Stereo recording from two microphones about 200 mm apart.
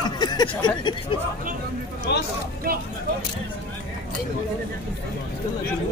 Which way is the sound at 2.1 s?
55° left (ahead or behind).